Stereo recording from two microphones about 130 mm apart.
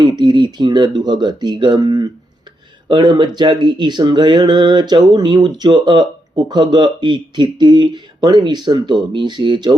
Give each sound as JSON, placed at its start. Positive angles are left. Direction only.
{"t": 0.0, "sound": "speech", "side_deg": -35}